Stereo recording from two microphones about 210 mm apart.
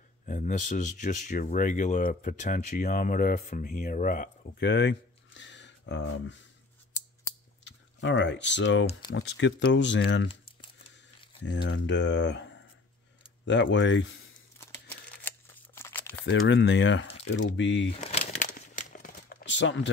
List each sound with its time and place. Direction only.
0.3 s speech: 35° left (ahead or behind); by 6.3 s 60° left (ahead or behind)
7.6 s speech: 60° left (ahead or behind)
11.4 s speech: 60° left (ahead or behind)
14.6 s crumpling: 10° left (ahead or behind)
16.3 s speech: 60° left (ahead or behind)
18.0 s crumpling: 30° left (ahead or behind)
19.4 s speech: 60° left (ahead or behind)